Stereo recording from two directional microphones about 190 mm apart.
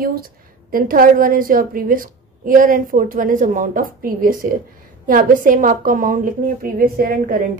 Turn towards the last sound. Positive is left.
turn(degrees=-45)  # may be behind; listen again after turning